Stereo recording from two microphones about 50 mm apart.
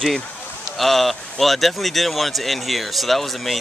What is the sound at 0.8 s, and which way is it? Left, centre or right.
Speech, centre.